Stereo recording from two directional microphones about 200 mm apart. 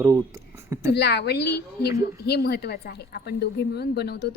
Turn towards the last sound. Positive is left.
turn(degrees=55)  # may be behind; listen again after turning